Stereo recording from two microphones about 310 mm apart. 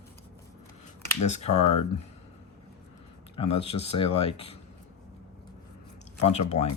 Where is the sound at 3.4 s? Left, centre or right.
Centre.